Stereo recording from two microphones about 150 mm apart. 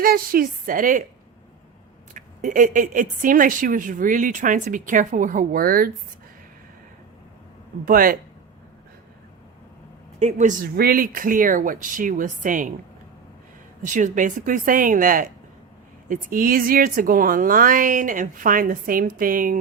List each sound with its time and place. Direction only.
0.0 s speech: 75° right (ahead or behind)
2.1 s speech: 60° right (ahead or behind)
7.9 s speech: 70° right (ahead or behind)
10.2 s a man's voice: 50° right (ahead or behind)
10.8 s speech: 75° right (ahead or behind)
13.8 s speech: 60° right (ahead or behind)